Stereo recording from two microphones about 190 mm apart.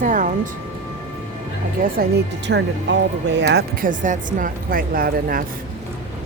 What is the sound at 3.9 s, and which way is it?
A woman's voice, 45° right (ahead or behind).